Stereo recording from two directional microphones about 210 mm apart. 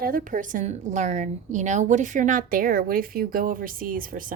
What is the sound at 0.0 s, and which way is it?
A woman's voice, 45° right (ahead or behind).